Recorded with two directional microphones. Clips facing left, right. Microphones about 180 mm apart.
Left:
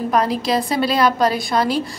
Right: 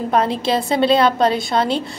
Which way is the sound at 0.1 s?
30° right (ahead or behind).